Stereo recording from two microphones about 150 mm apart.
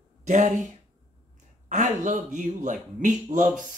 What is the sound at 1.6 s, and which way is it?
Speech, 55° right (ahead or behind).